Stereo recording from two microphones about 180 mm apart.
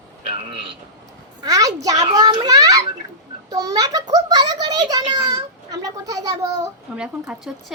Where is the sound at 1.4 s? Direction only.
20° right (ahead or behind).